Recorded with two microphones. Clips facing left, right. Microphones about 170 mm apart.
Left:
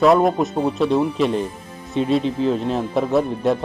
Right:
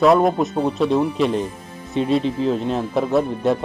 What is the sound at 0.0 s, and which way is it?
Speech, centre (ahead or behind).